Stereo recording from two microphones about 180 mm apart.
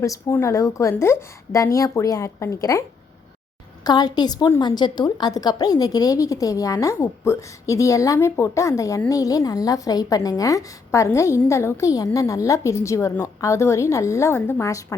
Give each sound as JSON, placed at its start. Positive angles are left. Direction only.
{"t": 0.0, "sound": "a woman's voice", "side_deg": 15}
{"t": 3.8, "sound": "a woman's voice", "side_deg": 20}